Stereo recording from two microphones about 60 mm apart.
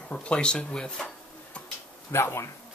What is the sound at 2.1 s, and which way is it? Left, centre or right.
Speech, left.